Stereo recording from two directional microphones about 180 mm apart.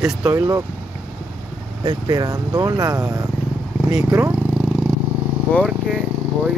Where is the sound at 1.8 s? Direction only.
25° right (ahead or behind).